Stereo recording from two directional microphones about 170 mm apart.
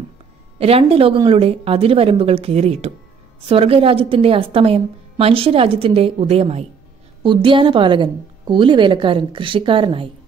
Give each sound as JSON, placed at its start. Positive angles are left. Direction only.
{"t": 0.6, "sound": "a woman's voice", "side_deg": -35}